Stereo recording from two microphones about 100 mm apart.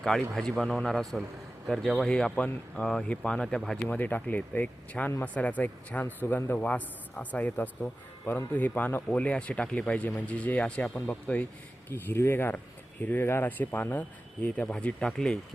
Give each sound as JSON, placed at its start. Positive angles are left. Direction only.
{"t": 0.0, "sound": "a man's voice", "side_deg": 5}
{"t": 3.8, "sound": "a man's voice", "side_deg": 20}